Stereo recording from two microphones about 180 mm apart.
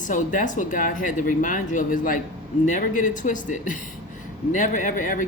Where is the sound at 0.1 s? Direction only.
45° left (ahead or behind).